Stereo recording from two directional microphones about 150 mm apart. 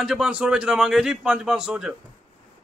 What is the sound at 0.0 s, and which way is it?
A man's voice, 5° right (ahead or behind).